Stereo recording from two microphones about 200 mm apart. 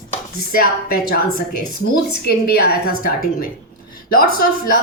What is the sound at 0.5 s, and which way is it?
Speech, 50° left (ahead or behind).